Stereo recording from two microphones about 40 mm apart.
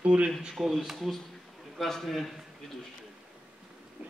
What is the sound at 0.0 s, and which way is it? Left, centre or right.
Speech, right.